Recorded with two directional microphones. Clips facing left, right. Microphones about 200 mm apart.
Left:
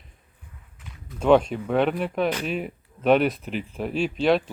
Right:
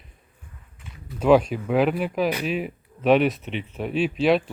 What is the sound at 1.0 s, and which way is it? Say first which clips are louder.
Speech: right 1 dB; 5° right (ahead or behind).